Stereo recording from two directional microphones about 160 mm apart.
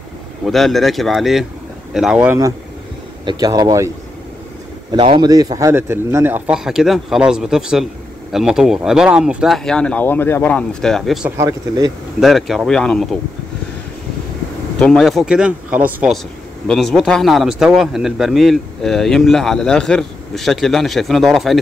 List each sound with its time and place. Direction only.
0.5 s a man's voice: centre (ahead or behind)
3.3 s speech: 25° right (ahead or behind)
4.9 s a man's voice: 30° right (ahead or behind); by 11.1 s centre (ahead or behind)
11.2 s speech: 20° right (ahead or behind)
12.2 s a man's voice: centre (ahead or behind)
14.8 s a man's voice: centre (ahead or behind)
16.6 s a man's voice: centre (ahead or behind)